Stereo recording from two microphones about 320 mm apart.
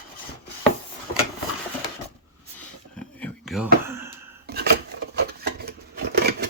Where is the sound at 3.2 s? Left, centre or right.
Centre.